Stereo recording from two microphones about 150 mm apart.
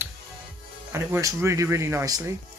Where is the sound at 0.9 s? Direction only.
20° right (ahead or behind).